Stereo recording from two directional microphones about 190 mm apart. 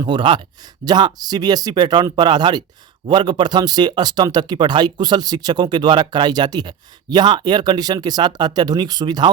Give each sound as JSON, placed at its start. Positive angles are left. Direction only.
{"t": 0.0, "sound": "speech", "side_deg": -25}